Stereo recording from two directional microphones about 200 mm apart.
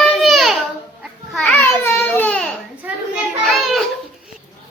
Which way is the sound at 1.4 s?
10° left (ahead or behind).